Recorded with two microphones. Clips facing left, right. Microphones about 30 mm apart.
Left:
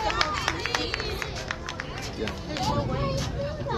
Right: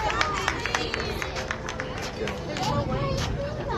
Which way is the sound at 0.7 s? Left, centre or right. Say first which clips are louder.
Right 1 dB; left.